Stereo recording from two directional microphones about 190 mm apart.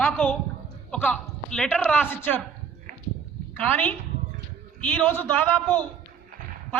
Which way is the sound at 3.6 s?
10° left (ahead or behind).